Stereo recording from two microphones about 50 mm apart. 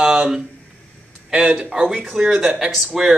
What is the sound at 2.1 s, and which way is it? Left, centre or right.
Speech, centre.